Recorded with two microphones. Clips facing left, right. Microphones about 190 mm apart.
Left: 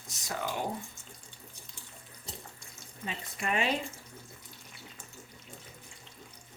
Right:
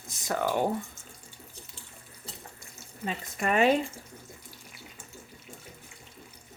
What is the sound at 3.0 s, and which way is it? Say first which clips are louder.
Speech: right 5 dB; 45° right (ahead or behind).